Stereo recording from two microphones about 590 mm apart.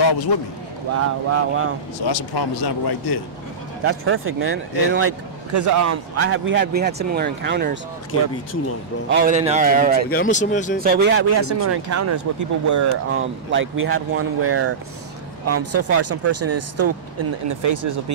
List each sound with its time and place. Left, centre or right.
0.9 s speech: right
2.0 s speech: left
3.8 s speech: right
9.1 s a man's voice: centre
10.1 s speech: centre
10.8 s speech: centre